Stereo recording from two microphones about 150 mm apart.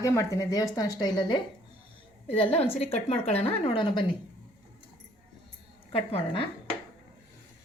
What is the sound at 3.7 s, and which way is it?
Speech, 30° left (ahead or behind).